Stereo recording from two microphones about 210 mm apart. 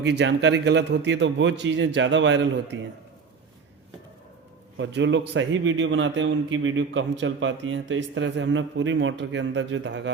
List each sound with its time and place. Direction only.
0.0 s a man's voice: 55° right (ahead or behind)
4.8 s a man's voice: 55° right (ahead or behind)